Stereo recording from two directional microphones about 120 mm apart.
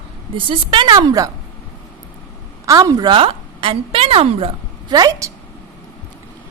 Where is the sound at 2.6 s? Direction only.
30° right (ahead or behind); by 4.5 s 50° right (ahead or behind).